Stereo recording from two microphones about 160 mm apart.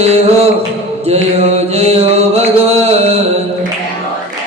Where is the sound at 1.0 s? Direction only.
40° right (ahead or behind).